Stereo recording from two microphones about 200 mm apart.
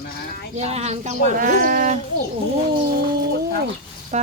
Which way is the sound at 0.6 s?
35° right (ahead or behind).